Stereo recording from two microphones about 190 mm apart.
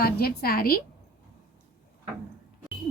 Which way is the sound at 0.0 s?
55° left (ahead or behind).